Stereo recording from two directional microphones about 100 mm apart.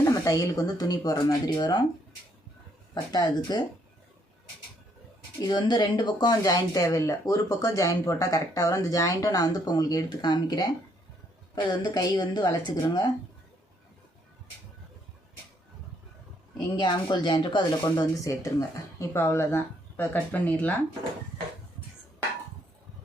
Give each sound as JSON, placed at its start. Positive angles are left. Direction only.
{"t": 0.0, "sound": "speech", "side_deg": 35}
{"t": 2.9, "sound": "speech", "side_deg": 45}
{"t": 5.4, "sound": "speech", "side_deg": 45}
{"t": 11.7, "sound": "speech", "side_deg": 45}
{"t": 16.6, "sound": "speech", "side_deg": 50}
{"t": 18.9, "sound": "speech", "side_deg": 25}